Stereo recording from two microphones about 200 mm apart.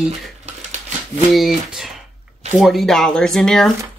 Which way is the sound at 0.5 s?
35° right (ahead or behind).